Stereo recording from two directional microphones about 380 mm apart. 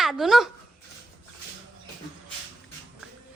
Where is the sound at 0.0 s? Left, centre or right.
Centre.